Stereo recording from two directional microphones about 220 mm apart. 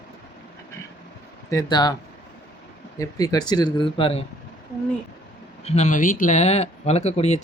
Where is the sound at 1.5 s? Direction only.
20° left (ahead or behind).